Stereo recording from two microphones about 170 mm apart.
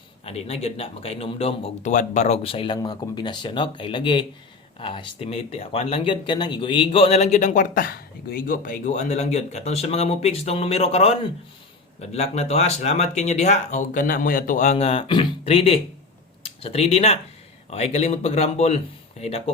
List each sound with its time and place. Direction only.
0.3 s speech: 35° left (ahead or behind)